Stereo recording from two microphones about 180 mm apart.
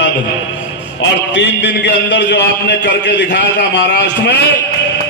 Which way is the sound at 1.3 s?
75° left (ahead or behind).